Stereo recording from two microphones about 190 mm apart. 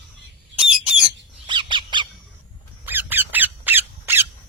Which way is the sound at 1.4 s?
25° right (ahead or behind).